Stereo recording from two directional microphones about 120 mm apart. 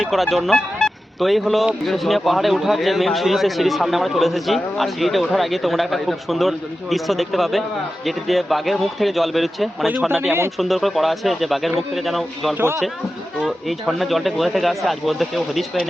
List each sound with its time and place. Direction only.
0.0 s speech: centre (ahead or behind)
12.5 s a man's voice: 20° right (ahead or behind)
13.4 s speech: centre (ahead or behind)